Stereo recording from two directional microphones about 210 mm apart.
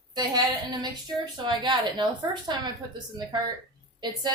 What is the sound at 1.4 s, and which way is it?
A woman's voice, 20° right (ahead or behind).